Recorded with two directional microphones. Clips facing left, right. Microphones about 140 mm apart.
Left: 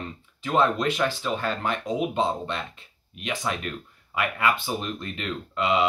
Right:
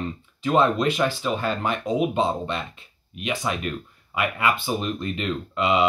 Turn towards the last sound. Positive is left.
turn(degrees=-20)  # may be behind; listen again after turning